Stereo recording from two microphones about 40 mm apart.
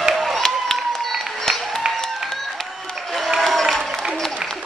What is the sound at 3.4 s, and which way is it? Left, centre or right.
Applause, centre.